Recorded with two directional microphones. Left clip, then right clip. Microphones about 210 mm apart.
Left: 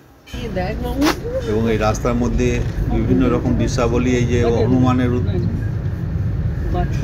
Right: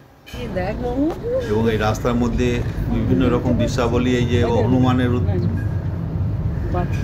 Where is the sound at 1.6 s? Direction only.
5° left (ahead or behind).